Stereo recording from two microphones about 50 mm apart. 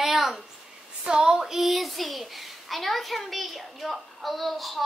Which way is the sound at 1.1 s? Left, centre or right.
Centre.